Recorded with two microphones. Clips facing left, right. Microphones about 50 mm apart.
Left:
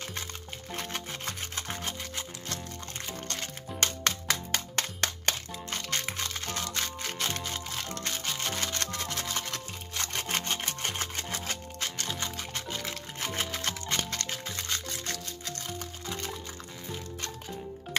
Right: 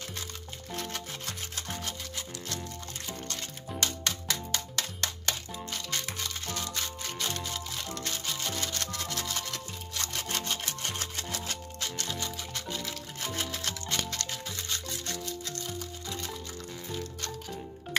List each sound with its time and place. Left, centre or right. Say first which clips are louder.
0.7 s music: left 1 dB; left
3.8 s music: left 4 dB; left
7.2 s music: left 1 dB; left
8.9 s music: left 1 dB; left
14.9 s music: even; left